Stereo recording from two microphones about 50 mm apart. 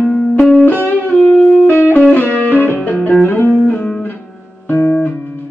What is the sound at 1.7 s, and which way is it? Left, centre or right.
Music, left.